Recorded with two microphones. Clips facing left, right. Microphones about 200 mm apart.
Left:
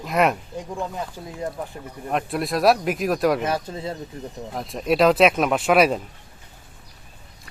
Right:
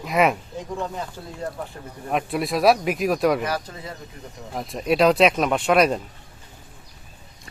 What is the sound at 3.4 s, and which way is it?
Speech, 25° left (ahead or behind).